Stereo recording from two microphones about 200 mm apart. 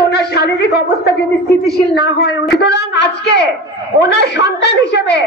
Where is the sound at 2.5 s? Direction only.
60° left (ahead or behind).